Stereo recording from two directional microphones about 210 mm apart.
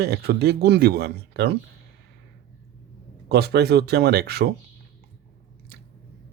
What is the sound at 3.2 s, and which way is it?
Speech, 50° right (ahead or behind).